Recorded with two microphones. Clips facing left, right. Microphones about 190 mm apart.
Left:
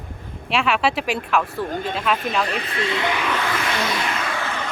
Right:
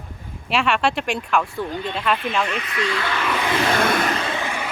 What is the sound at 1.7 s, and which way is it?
Speech, 45° left (ahead or behind).